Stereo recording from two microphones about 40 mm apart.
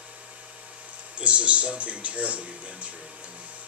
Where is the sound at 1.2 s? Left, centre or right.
Right.